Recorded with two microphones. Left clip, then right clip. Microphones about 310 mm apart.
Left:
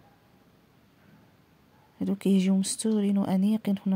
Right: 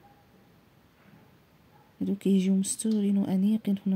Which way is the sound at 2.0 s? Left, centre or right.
Left.